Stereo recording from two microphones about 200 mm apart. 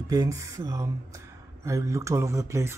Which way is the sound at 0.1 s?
15° right (ahead or behind).